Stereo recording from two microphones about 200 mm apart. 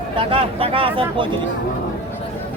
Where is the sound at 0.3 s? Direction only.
30° right (ahead or behind).